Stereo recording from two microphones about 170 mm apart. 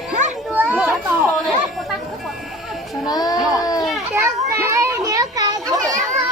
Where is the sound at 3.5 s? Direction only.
20° left (ahead or behind).